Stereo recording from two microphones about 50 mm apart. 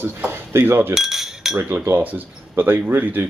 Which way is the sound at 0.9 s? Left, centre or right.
Centre.